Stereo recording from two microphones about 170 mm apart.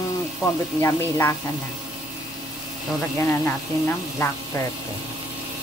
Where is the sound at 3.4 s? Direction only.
15° left (ahead or behind).